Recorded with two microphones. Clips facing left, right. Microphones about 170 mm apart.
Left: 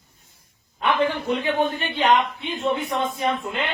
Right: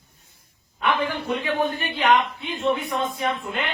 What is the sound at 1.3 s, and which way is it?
A man's voice, 30° left (ahead or behind).